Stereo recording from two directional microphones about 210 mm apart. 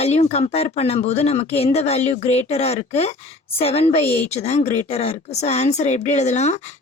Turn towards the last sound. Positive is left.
turn(degrees=35)  # may be behind; listen again after turning